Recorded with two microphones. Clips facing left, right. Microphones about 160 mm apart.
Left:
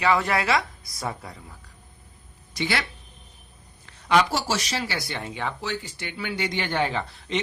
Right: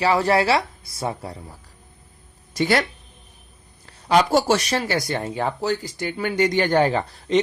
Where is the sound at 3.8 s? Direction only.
35° right (ahead or behind).